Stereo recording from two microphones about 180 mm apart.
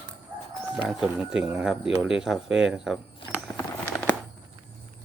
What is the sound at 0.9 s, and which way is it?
Speech, 5° right (ahead or behind).